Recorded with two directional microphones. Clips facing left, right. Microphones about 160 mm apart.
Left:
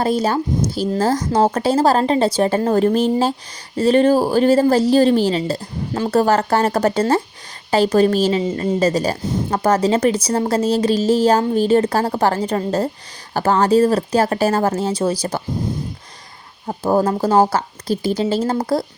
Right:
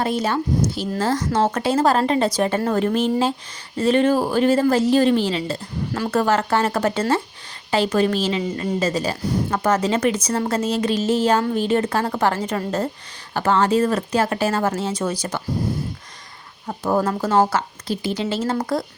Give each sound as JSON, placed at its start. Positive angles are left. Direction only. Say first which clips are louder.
{"t": 0.0, "sound": "a woman's voice", "louder": "left 4 dB", "side_deg": 35}
{"t": 8.4, "sound": "speech", "louder": "left 4 dB", "side_deg": 25}
{"t": 8.8, "sound": "a woman's voice", "louder": "left 5 dB", "side_deg": 40}
{"t": 16.6, "sound": "a woman's voice", "louder": "left 4 dB", "side_deg": 30}